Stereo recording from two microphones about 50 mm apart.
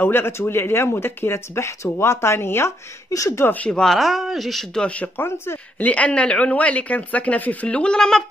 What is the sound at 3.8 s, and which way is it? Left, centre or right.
Speech, centre.